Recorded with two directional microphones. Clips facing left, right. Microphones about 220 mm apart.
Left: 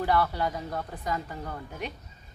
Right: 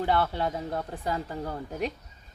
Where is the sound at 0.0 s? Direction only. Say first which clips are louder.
Even; 25° right (ahead or behind).